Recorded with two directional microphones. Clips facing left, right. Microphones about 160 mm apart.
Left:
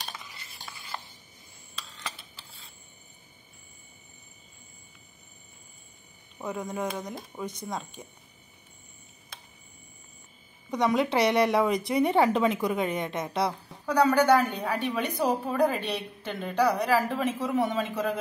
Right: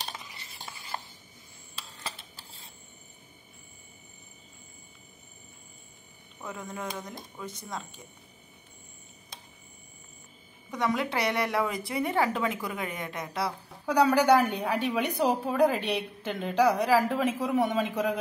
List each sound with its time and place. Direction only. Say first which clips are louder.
6.4 s speech: left 5 dB; 20° left (ahead or behind)
10.7 s a woman's voice: left 4 dB; 20° left (ahead or behind)
13.8 s a woman's voice: even; 10° right (ahead or behind)